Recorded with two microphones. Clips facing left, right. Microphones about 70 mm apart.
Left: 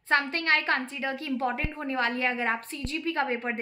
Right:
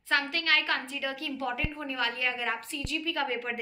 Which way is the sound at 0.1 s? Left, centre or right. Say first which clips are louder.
Left 3 dB; left.